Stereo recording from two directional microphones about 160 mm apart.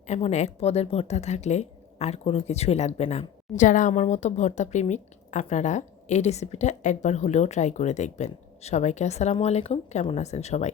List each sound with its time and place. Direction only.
0.1 s a woman's voice: 45° left (ahead or behind)